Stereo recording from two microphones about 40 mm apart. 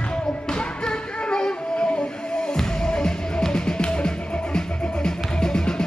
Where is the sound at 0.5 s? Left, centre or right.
Left.